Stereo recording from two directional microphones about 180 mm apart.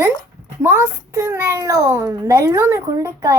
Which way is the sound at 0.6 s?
15° right (ahead or behind).